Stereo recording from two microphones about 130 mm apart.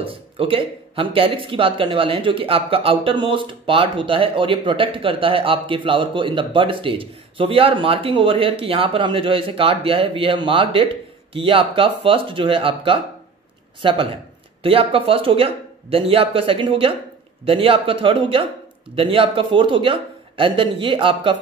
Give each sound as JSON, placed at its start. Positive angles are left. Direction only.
{"t": 0.0, "sound": "speech", "side_deg": -45}